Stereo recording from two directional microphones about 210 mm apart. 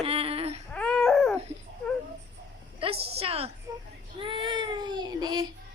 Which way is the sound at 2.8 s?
25° right (ahead or behind).